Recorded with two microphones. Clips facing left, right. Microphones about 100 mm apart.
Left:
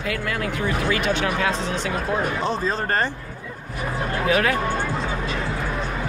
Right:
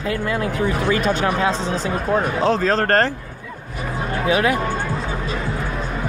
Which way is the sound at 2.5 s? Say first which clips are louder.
Right 6 dB; 90° right.